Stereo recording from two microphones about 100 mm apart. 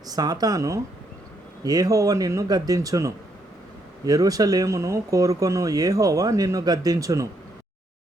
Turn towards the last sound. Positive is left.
turn(degrees=-35)  # may be behind; listen again after turning